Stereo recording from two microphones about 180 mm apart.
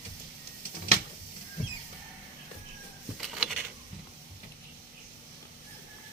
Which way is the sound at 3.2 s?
Centre (ahead or behind).